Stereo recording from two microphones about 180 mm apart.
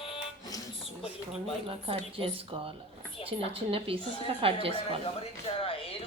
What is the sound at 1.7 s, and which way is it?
A woman's voice, 30° right (ahead or behind).